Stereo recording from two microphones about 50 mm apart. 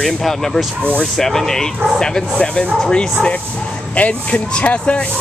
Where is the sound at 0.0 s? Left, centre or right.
Centre.